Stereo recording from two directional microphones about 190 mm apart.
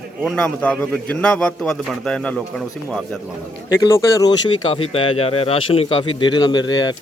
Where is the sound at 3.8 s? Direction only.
20° left (ahead or behind).